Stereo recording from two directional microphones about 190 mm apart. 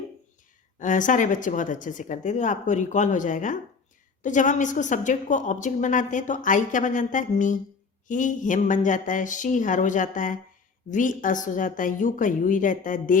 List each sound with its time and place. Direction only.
0.8 s a woman's voice: 40° left (ahead or behind)